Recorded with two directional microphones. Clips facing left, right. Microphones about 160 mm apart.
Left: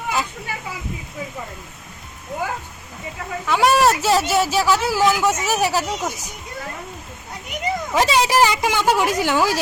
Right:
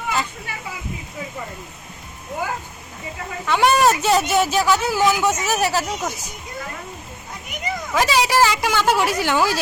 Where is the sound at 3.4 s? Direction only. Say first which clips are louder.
Even; 5° left (ahead or behind).